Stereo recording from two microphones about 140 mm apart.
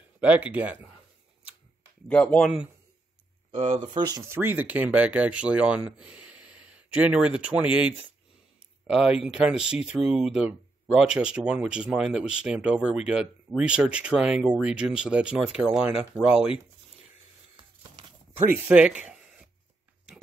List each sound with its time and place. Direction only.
0.2 s speech: 10° right (ahead or behind)
2.0 s speech: 10° left (ahead or behind)
3.5 s speech: 55° right (ahead or behind)
3.8 s speech: 30° right (ahead or behind); by 16.6 s 5° right (ahead or behind)
18.5 s speech: 10° right (ahead or behind)